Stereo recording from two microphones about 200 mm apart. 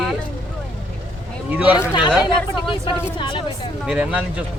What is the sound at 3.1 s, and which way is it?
Speech, 25° left (ahead or behind).